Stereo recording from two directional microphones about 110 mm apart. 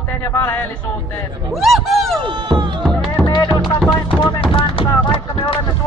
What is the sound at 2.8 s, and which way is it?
Music, 5° left (ahead or behind).